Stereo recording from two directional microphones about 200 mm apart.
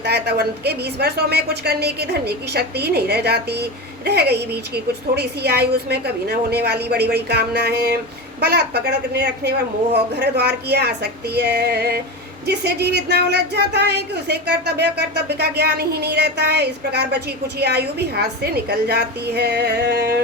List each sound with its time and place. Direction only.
0.0 s a woman's voice: 55° right (ahead or behind)